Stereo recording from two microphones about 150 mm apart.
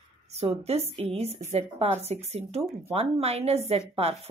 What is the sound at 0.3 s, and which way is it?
A woman's voice, 45° right (ahead or behind).